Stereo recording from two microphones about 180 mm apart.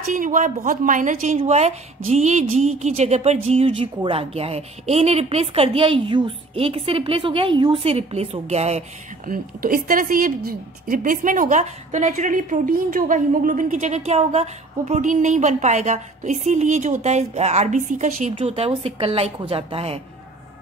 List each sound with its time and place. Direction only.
0.0 s speech: 45° right (ahead or behind)
9.3 s a woman's voice: 50° right (ahead or behind)
18.3 s speech: 30° right (ahead or behind)